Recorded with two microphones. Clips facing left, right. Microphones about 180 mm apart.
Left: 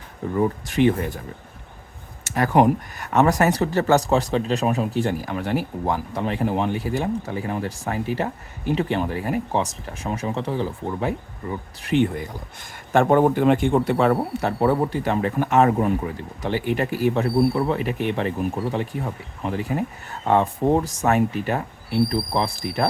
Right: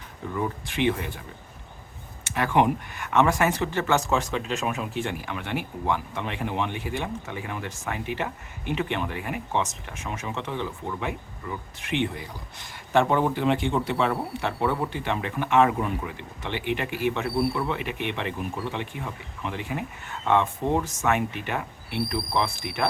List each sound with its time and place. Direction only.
0.3 s a man's voice: 40° left (ahead or behind)
2.2 s a man's voice: 40° left (ahead or behind)